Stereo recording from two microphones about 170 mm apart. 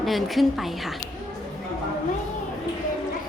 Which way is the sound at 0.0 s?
Centre (ahead or behind).